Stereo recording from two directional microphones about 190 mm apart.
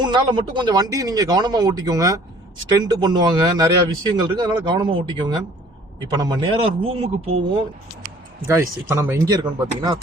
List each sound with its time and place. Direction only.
0.0 s a man's voice: 25° right (ahead or behind)
8.4 s speech: 15° right (ahead or behind)